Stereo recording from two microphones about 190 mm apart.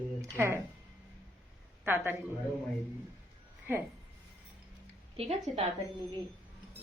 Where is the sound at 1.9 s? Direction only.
10° right (ahead or behind).